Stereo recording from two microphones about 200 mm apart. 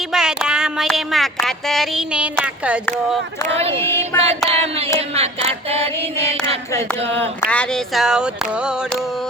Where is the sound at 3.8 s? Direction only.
10° left (ahead or behind).